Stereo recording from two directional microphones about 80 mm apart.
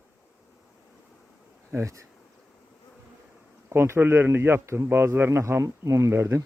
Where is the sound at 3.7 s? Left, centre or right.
Right.